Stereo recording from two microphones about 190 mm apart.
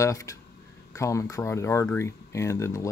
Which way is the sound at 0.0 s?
15° left (ahead or behind).